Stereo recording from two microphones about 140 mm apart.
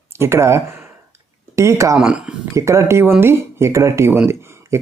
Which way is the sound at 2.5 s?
20° right (ahead or behind).